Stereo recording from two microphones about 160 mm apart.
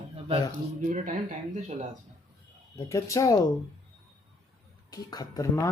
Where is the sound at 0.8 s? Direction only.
50° right (ahead or behind).